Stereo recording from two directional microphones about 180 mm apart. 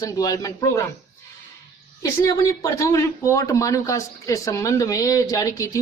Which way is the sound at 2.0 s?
20° left (ahead or behind).